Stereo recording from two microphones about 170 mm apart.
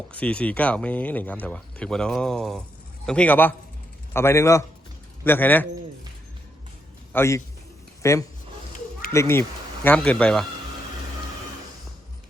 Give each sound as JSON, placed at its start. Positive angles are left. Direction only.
{"t": 0.1, "sound": "speech", "side_deg": 10}
{"t": 7.1, "sound": "speech", "side_deg": 15}